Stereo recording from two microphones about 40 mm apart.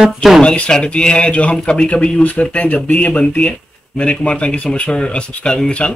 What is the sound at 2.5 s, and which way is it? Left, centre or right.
Speech, left.